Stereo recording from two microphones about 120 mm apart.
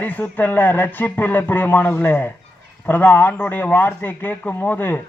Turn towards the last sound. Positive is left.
turn(degrees=20)  # may be behind; listen again after turning